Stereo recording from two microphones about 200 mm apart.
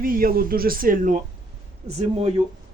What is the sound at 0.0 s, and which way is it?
Speech, 45° right (ahead or behind).